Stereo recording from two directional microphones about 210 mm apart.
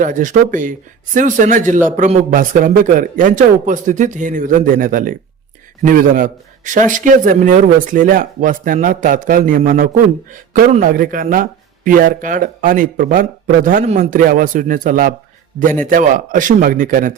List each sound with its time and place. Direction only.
0.0 s a man's voice: 40° right (ahead or behind)